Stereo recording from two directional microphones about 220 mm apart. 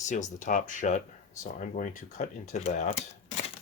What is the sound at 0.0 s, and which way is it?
Speech, 35° left (ahead or behind).